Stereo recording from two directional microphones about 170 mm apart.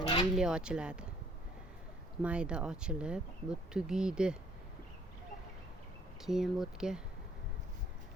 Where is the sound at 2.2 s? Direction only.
5° right (ahead or behind).